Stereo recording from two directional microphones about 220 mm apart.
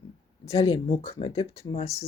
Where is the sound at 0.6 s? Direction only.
20° left (ahead or behind).